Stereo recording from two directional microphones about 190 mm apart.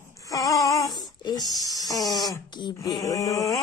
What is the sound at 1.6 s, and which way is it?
Electric toothbrush, 20° left (ahead or behind).